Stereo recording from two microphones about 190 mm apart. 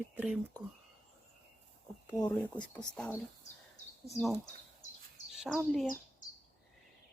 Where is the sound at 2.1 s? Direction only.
20° left (ahead or behind).